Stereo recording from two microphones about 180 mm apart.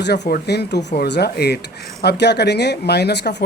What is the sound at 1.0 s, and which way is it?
Speech, 65° left (ahead or behind).